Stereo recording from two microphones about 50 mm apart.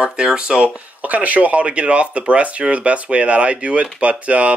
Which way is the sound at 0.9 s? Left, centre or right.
Right.